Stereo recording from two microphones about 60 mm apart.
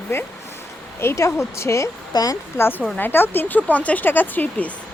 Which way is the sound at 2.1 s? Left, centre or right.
Left.